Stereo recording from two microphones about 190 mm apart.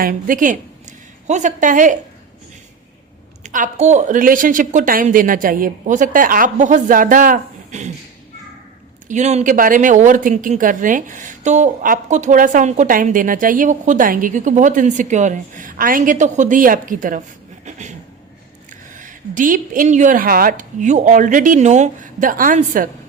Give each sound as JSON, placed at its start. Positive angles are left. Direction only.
{"t": 0.0, "sound": "speech", "side_deg": -45}
{"t": 3.4, "sound": "speech", "side_deg": -40}
{"t": 9.0, "sound": "speech", "side_deg": -40}
{"t": 17.7, "sound": "a sound", "side_deg": -40}
{"t": 18.9, "sound": "speech", "side_deg": -45}